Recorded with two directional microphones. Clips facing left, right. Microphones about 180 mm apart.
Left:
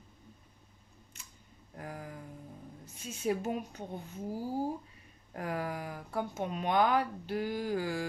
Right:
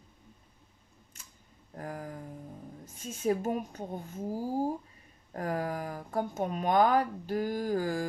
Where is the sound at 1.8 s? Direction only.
45° right (ahead or behind).